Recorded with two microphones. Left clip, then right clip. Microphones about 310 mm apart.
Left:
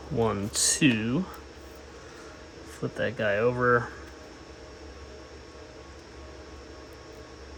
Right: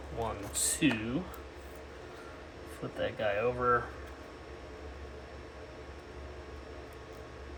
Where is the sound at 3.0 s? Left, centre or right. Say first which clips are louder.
Left 6 dB; left.